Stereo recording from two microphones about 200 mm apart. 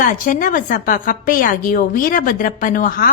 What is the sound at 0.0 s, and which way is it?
A woman's voice, 40° left (ahead or behind).